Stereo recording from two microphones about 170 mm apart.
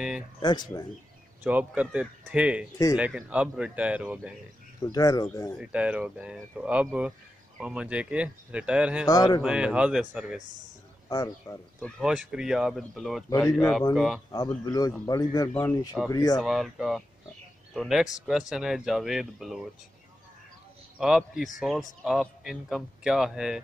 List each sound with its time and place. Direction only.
0.4 s a man's voice: 25° left (ahead or behind)
1.4 s speech: 10° right (ahead or behind)
4.9 s a man's voice: 20° left (ahead or behind)
5.6 s speech: 5° right (ahead or behind)
9.0 s a man's voice: 25° left (ahead or behind)
9.4 s speech: 5° right (ahead or behind)
11.1 s a man's voice: 20° left (ahead or behind)
11.8 s speech: 5° right (ahead or behind)
14.3 s a man's voice: 20° left (ahead or behind)
16.3 s speech: centre (ahead or behind)
21.0 s speech: centre (ahead or behind)